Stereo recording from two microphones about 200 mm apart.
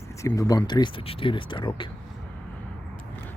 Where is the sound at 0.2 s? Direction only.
15° left (ahead or behind).